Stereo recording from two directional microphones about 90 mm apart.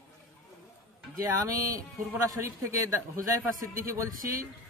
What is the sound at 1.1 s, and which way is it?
A man's voice, 35° right (ahead or behind).